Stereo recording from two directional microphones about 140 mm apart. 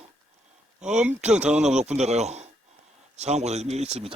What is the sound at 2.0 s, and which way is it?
Speech, 55° right (ahead or behind).